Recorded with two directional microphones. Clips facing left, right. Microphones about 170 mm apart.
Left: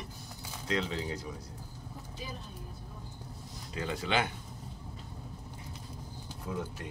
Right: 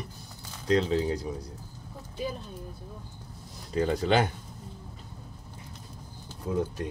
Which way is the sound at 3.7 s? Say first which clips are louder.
Right 8 dB; 40° right (ahead or behind).